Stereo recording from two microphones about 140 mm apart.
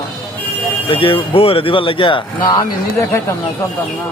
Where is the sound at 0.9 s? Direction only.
40° left (ahead or behind).